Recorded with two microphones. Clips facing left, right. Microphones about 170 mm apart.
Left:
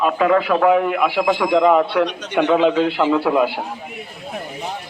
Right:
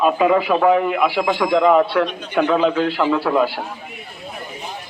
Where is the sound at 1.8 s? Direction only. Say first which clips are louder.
Left 1 dB; 20° left (ahead or behind).